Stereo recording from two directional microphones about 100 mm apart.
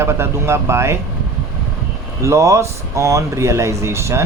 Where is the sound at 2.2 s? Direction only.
30° right (ahead or behind).